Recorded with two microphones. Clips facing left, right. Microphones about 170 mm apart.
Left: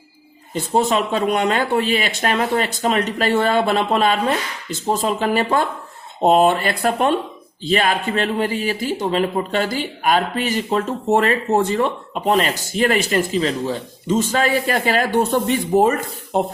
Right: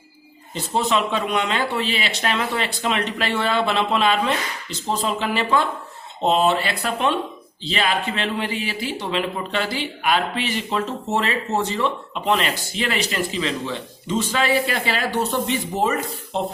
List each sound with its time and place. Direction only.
0.5 s speech: 50° left (ahead or behind)